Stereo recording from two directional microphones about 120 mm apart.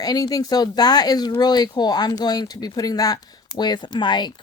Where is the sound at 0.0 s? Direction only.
30° left (ahead or behind).